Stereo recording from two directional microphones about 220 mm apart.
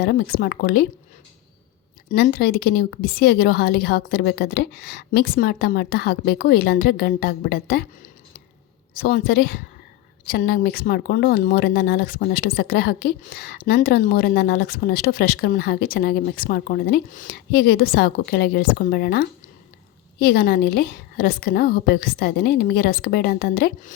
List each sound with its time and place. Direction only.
0.0 s speech: 45° left (ahead or behind)
2.0 s speech: 40° left (ahead or behind)